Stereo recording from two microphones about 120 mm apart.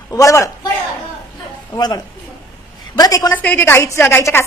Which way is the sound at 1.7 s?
35° left (ahead or behind).